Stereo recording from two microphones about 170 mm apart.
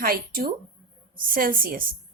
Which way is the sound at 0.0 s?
60° right (ahead or behind).